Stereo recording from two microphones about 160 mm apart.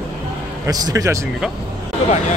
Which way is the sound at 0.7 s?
25° right (ahead or behind).